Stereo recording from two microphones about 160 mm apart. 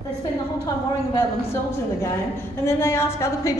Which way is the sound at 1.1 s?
15° left (ahead or behind).